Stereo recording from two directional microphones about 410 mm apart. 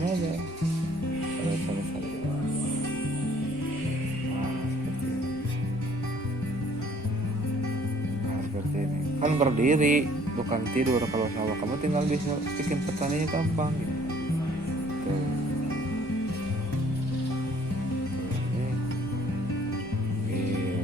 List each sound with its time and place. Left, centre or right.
9.2 s speech: centre